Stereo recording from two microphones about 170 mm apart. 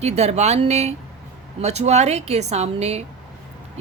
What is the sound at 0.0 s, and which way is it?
Speech, 40° right (ahead or behind).